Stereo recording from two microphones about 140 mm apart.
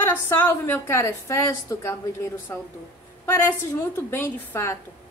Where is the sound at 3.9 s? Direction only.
15° left (ahead or behind).